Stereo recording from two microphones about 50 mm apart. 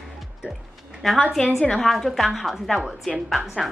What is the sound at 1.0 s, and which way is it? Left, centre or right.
A woman's voice, centre.